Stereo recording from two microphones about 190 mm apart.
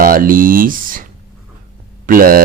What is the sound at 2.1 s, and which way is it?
Speech, 50° right (ahead or behind).